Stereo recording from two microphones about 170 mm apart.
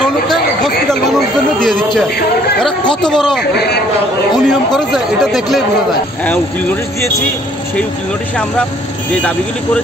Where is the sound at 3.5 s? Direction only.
70° left (ahead or behind).